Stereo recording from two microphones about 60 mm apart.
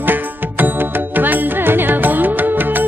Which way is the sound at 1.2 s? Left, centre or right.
Right.